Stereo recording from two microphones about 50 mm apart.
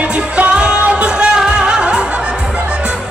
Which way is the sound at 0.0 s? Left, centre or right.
Right.